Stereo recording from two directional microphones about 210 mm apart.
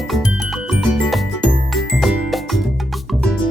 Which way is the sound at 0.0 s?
Centre (ahead or behind).